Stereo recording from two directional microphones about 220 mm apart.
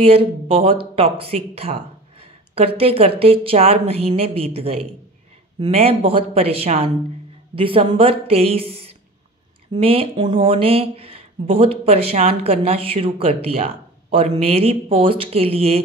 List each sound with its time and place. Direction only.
0.0 s speech: 25° right (ahead or behind)